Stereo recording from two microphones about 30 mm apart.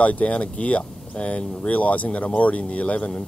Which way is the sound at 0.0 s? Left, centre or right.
Left.